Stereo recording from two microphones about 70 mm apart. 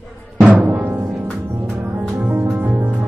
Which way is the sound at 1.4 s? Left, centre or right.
Right.